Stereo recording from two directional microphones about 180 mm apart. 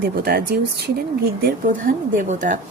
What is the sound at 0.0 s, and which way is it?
Speech, 60° right (ahead or behind).